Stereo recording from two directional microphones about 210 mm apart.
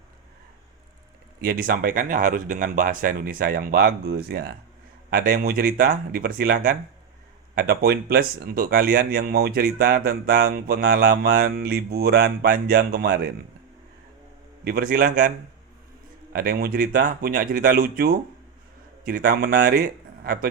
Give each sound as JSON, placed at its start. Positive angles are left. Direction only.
{"t": 1.4, "sound": "speech", "side_deg": -45}
{"t": 14.6, "sound": "speech", "side_deg": -45}
{"t": 16.3, "sound": "speech", "side_deg": -45}